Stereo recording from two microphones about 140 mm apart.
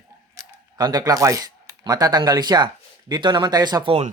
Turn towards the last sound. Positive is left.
turn(degrees=-30)  # may be behind; listen again after turning